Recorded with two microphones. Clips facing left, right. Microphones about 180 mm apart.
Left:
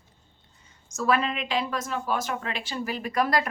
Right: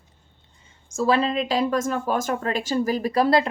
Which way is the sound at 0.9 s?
30° right (ahead or behind).